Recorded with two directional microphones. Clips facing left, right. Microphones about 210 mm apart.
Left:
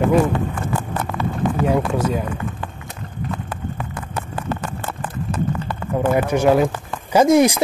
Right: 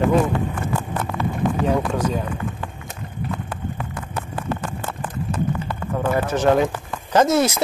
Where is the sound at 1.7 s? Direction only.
10° left (ahead or behind).